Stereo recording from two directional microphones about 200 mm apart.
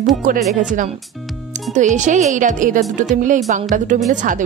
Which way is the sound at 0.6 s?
40° right (ahead or behind).